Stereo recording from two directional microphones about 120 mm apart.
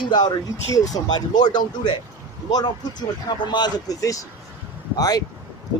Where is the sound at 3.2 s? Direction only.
40° left (ahead or behind).